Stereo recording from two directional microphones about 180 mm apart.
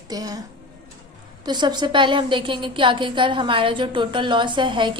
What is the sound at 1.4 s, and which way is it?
A woman's voice, 25° right (ahead or behind).